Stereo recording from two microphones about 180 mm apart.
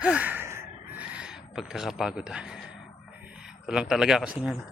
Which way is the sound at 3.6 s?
5° right (ahead or behind).